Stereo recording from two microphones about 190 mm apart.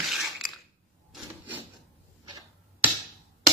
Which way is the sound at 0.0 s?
Centre (ahead or behind).